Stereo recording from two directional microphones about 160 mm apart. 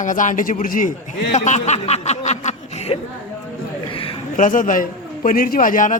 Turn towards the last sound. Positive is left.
turn(degrees=55)  # may be behind; listen again after turning